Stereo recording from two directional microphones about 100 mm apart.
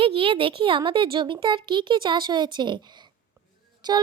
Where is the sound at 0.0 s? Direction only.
65° right (ahead or behind).